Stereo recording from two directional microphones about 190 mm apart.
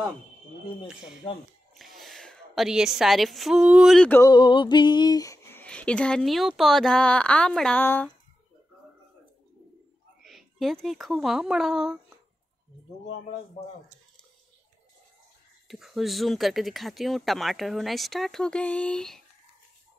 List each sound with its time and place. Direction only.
1.2 s speech: 30° left (ahead or behind)
2.0 s speech: centre (ahead or behind)
4.2 s speech: 25° left (ahead or behind)
10.2 s a woman's voice: centre (ahead or behind)
15.7 s speech: centre (ahead or behind)